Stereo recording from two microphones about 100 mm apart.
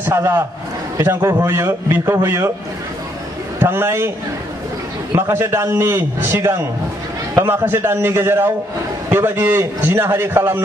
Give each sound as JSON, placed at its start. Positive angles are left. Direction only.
{"t": 0.0, "sound": "a man's voice", "side_deg": -25}
{"t": 3.5, "sound": "a man's voice", "side_deg": -25}
{"t": 5.1, "sound": "a man's voice", "side_deg": -25}